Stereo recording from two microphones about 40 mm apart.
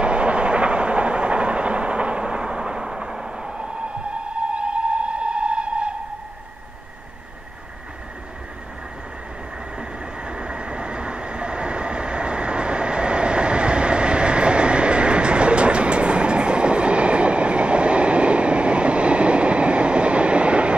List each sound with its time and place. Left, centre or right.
0.0 s train: right
9.8 s train: right